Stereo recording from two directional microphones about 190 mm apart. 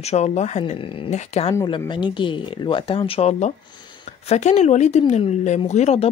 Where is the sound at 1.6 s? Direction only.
20° left (ahead or behind).